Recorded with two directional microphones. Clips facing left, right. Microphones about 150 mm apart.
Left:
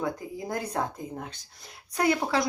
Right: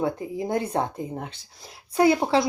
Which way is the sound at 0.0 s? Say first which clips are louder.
Right 5 dB; 25° right (ahead or behind).